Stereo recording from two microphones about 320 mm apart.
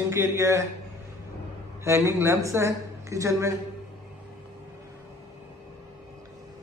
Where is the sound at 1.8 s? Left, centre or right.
Centre.